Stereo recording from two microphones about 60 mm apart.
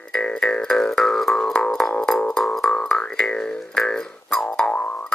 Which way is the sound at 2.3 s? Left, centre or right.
Centre.